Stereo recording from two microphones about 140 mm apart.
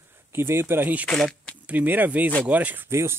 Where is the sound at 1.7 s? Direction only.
10° right (ahead or behind).